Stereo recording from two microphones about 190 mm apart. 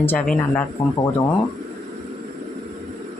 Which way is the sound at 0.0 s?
10° left (ahead or behind).